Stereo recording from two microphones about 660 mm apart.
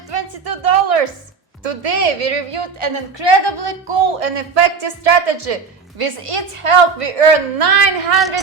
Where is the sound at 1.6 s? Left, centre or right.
Right.